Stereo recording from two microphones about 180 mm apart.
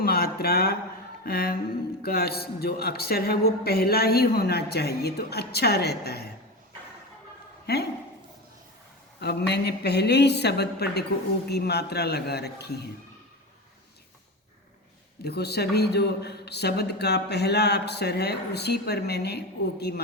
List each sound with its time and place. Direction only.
0.0 s a sound: 60° left (ahead or behind)
1.2 s a man's voice: 55° left (ahead or behind)
9.2 s a woman's voice: 65° left (ahead or behind)
15.2 s a man's voice: 65° left (ahead or behind)